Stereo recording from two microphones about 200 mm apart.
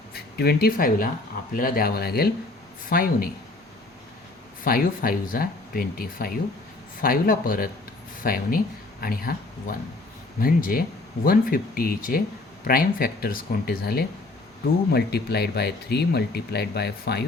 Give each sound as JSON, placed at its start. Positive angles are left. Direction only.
{"t": 0.1, "sound": "speech", "side_deg": 50}
{"t": 4.6, "sound": "speech", "side_deg": 45}